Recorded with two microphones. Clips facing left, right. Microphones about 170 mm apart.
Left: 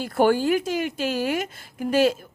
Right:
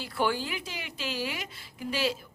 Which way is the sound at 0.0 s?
45° left (ahead or behind).